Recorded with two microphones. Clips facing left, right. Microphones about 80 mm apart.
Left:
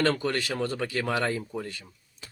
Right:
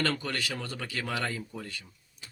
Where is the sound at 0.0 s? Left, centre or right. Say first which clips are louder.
Left 5 dB; left.